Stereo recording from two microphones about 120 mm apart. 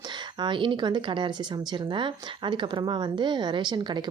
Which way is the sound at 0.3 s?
40° right (ahead or behind).